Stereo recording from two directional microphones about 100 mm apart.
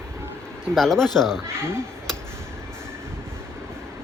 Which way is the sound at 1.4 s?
25° right (ahead or behind).